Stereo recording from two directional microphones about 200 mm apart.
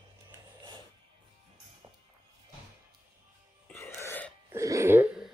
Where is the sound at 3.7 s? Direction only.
10° left (ahead or behind).